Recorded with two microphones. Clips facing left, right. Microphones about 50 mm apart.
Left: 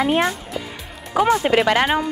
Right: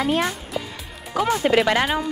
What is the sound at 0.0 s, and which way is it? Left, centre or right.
Speech, left.